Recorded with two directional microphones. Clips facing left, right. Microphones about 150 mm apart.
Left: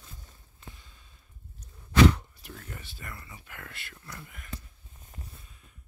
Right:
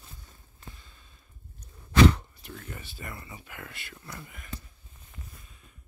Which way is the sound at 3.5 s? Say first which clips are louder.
Right 2 dB; 5° right (ahead or behind).